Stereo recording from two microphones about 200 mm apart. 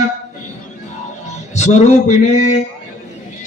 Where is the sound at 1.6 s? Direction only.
35° left (ahead or behind).